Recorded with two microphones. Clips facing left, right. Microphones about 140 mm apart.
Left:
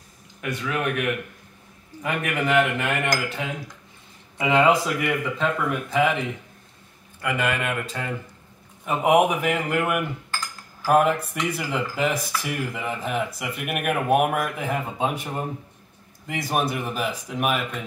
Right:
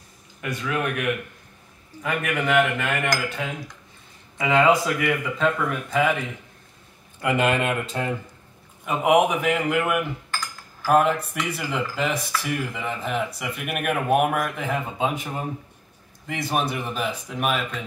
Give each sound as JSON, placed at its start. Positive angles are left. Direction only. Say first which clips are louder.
{"t": 0.5, "sound": "speech", "louder": "even", "side_deg": -10}
{"t": 2.0, "sound": "speech", "louder": "even", "side_deg": 10}
{"t": 4.4, "sound": "speech", "louder": "even", "side_deg": 10}
{"t": 7.2, "sound": "speech", "louder": "right 4 dB", "side_deg": -20}
{"t": 8.8, "sound": "speech", "louder": "even", "side_deg": 0}